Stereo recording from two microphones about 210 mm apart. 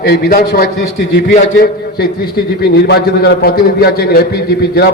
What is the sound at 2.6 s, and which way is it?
A man's voice, 50° left (ahead or behind).